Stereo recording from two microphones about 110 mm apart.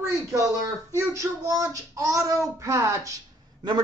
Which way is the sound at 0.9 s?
30° right (ahead or behind).